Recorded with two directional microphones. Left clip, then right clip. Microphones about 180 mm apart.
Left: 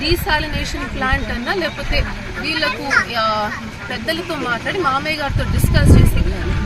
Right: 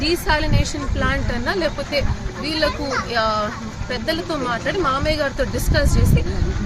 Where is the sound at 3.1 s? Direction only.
30° right (ahead or behind).